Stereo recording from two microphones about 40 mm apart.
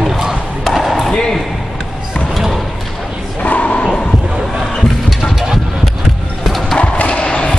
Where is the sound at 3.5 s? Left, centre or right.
Left.